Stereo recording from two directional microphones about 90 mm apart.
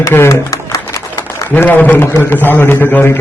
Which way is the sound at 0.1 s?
30° left (ahead or behind).